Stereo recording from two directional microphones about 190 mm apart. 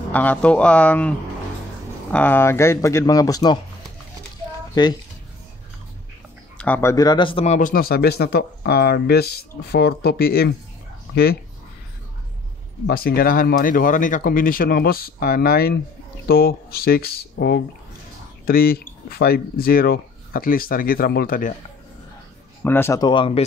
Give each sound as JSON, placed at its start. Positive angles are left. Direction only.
{"t": 0.1, "sound": "speech", "side_deg": 10}
{"t": 4.7, "sound": "speech", "side_deg": 20}
{"t": 6.6, "sound": "speech", "side_deg": 10}
{"t": 12.8, "sound": "speech", "side_deg": 55}
{"t": 22.6, "sound": "speech", "side_deg": 10}